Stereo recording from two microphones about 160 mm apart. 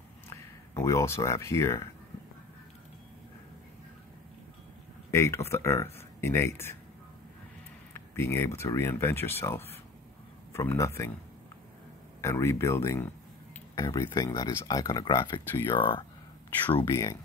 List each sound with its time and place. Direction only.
0.3 s speech: 20° left (ahead or behind)
5.1 s speech: 15° left (ahead or behind)
7.9 s speech: 15° left (ahead or behind)
12.2 s speech: 15° left (ahead or behind)